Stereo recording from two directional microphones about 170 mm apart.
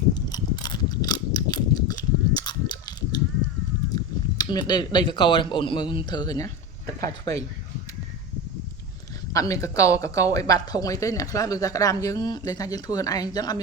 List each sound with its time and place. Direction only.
0.1 s mechanisms: 25° left (ahead or behind)
3.9 s speech: 25° left (ahead or behind)
9.3 s speech: 20° left (ahead or behind)